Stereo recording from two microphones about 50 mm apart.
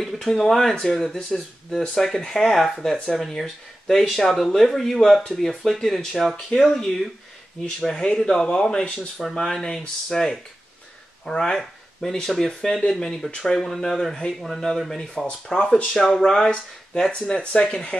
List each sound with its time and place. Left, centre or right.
0.0 s speech: centre
5.2 s speech: centre
5.5 s speech: centre
13.3 s speech: centre
13.6 s speech: centre
17.4 s speech: left